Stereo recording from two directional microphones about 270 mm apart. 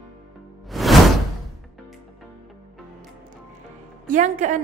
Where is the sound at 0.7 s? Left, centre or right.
Centre.